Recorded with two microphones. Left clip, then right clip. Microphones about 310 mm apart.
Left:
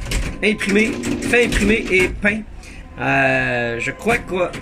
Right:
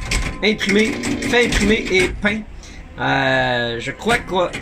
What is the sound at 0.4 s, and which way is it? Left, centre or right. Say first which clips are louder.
Speech: even; centre.